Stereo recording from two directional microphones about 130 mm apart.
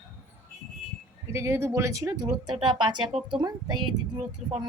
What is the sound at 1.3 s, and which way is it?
Speech, 20° right (ahead or behind).